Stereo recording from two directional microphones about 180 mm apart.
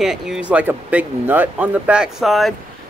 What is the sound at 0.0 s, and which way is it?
Speech, 5° right (ahead or behind).